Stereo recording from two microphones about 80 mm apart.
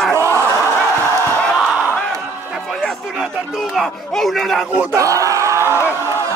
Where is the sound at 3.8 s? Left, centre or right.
Centre.